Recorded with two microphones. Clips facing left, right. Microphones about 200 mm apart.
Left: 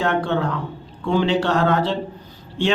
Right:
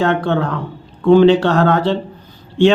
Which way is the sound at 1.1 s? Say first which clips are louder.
Right 9 dB; 60° right (ahead or behind).